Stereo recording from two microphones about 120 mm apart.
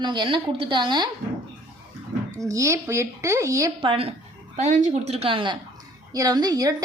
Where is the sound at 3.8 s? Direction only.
50° right (ahead or behind).